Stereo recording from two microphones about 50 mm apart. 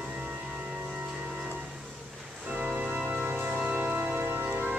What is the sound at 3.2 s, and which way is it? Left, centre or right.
Music, right.